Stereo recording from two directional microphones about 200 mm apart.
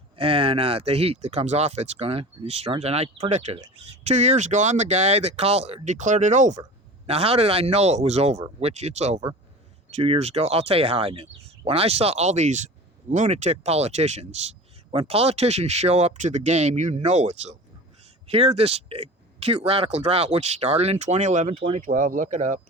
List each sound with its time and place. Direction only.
0.2 s speech: 25° right (ahead or behind)